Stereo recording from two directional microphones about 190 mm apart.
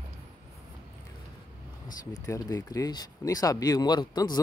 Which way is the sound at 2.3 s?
15° left (ahead or behind).